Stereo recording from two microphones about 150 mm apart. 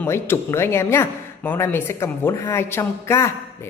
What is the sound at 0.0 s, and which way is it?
Speech, 15° left (ahead or behind).